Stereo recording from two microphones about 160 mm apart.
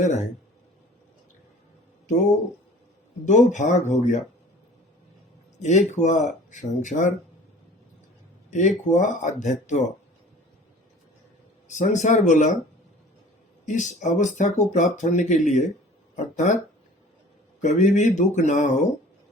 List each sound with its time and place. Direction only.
0.0 s a sound: 45° left (ahead or behind)
3.2 s speech: 50° left (ahead or behind)
5.6 s speech: 45° left (ahead or behind)
8.4 s speech: 50° left (ahead or behind)
11.7 s speech: 50° left (ahead or behind)
13.7 s speech: 50° left (ahead or behind)
16.1 s a sound: 50° left (ahead or behind)
17.6 s speech: 50° left (ahead or behind)